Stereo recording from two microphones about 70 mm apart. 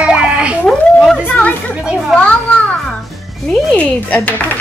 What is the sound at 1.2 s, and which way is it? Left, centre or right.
Speech, left.